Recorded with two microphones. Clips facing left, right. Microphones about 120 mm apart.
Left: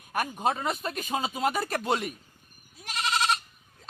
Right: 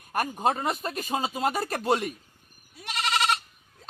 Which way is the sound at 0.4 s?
45° right (ahead or behind).